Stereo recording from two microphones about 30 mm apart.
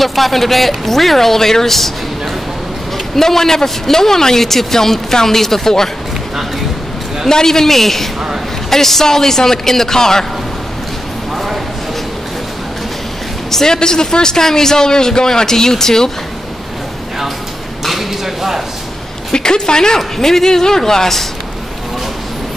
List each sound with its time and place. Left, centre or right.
0.0 s speech: centre
3.2 s speech: centre
7.2 s speech: centre
11.3 s a sound: centre
13.5 s speech: centre
13.7 s a man's voice: left
17.8 s a sound: centre
19.3 s a man's voice: left